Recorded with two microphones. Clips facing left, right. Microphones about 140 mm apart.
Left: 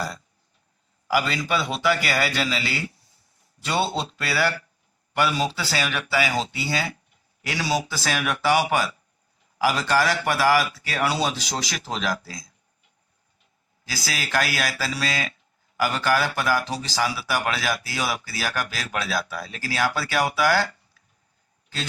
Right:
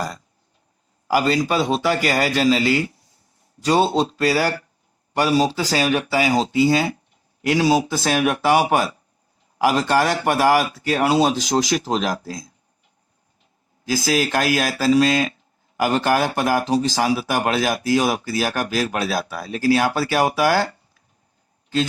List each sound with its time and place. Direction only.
1.0 s a man's voice: 40° right (ahead or behind)
13.8 s speech: 45° right (ahead or behind)